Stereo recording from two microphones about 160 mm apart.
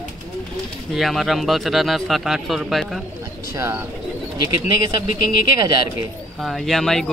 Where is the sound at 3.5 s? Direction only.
15° right (ahead or behind).